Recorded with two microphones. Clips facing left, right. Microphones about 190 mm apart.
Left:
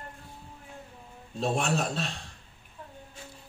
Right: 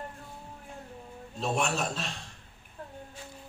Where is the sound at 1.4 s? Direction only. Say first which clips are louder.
Left 2 dB; 35° left (ahead or behind).